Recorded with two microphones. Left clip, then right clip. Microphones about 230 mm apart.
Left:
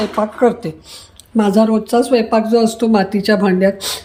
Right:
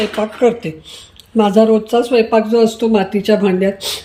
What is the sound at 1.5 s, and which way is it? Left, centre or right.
Speech, left.